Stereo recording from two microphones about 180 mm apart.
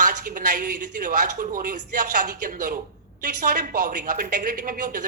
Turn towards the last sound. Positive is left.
turn(degrees=-45)  # may be behind; listen again after turning